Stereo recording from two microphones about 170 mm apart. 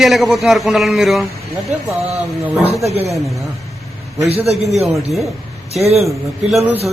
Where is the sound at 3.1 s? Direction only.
Centre (ahead or behind).